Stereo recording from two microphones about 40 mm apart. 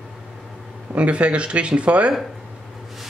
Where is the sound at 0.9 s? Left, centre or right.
Right.